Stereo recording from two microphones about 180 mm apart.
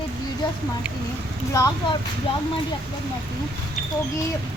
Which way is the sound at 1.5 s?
20° left (ahead or behind).